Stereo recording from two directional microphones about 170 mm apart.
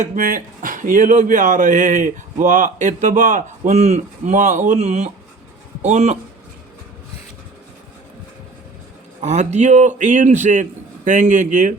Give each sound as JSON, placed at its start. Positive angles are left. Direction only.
{"t": 0.2, "sound": "speech", "side_deg": -55}
{"t": 9.2, "sound": "speech", "side_deg": -40}